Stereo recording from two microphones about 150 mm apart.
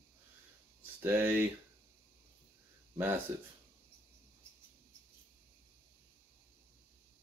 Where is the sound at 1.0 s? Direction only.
15° right (ahead or behind).